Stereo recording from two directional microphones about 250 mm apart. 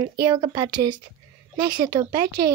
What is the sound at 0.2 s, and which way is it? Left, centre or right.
Speech, centre.